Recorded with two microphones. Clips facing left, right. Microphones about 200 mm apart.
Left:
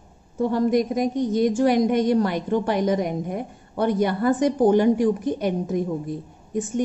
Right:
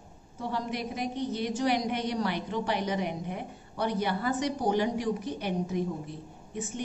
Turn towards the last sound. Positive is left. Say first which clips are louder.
# left 10 dB
turn(degrees=45)  # may be behind; listen again after turning